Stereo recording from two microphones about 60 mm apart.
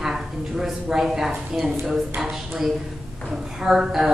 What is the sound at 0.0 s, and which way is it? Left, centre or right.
A woman's voice, centre.